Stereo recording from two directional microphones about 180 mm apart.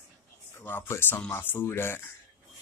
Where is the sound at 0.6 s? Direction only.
10° left (ahead or behind).